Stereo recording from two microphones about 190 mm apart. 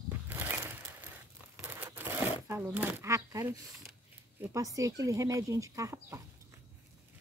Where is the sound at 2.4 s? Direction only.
10° right (ahead or behind).